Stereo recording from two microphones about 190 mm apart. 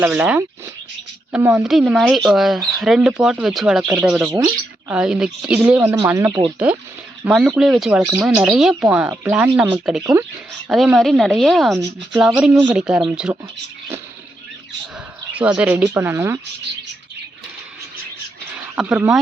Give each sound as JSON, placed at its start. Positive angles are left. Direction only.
{"t": 0.0, "sound": "speech", "side_deg": -5}
{"t": 4.4, "sound": "speech", "side_deg": -20}
{"t": 4.9, "sound": "speech", "side_deg": -5}
{"t": 15.3, "sound": "speech", "side_deg": -5}
{"t": 18.8, "sound": "speech", "side_deg": -5}